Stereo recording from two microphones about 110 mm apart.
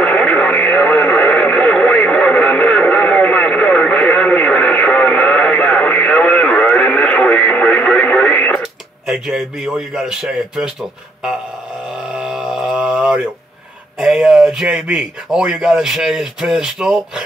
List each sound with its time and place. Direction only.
0.0 s radio: 10° left (ahead or behind)
8.5 s speech: 5° right (ahead or behind)
12.2 s a sound: 10° right (ahead or behind)
13.9 s a man's voice: 5° right (ahead or behind)